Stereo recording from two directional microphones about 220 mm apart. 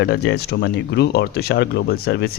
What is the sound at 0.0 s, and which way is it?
Speech, 50° left (ahead or behind).